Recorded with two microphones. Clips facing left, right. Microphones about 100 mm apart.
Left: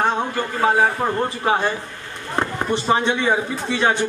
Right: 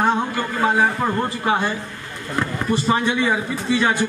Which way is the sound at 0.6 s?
20° left (ahead or behind).